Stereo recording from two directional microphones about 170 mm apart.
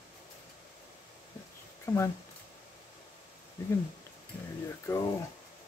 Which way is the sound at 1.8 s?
15° left (ahead or behind).